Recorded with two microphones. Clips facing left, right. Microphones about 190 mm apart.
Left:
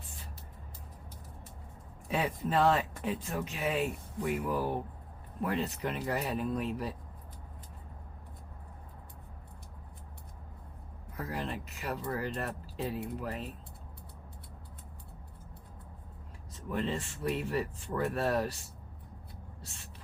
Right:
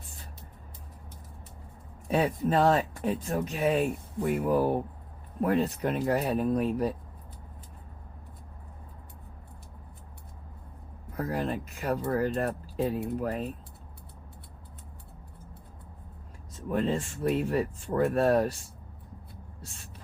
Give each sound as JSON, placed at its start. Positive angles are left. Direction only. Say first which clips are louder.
{"t": 2.0, "sound": "speech", "louder": "right 6 dB", "side_deg": -40}
{"t": 11.2, "sound": "speech", "louder": "right 7 dB", "side_deg": -45}
{"t": 16.6, "sound": "speech", "louder": "right 6 dB", "side_deg": -45}